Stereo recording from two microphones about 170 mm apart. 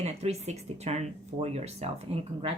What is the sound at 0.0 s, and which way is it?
Speech, 40° right (ahead or behind).